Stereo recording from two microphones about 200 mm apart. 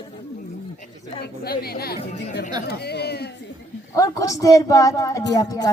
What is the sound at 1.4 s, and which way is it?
A woman's voice, 50° left (ahead or behind).